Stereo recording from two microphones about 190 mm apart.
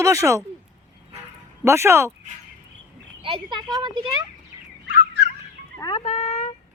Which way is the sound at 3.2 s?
25° right (ahead or behind).